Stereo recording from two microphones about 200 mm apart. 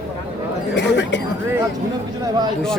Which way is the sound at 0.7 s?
60° left (ahead or behind).